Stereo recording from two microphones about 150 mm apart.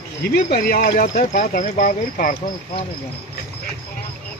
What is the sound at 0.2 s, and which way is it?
Speech, 80° left.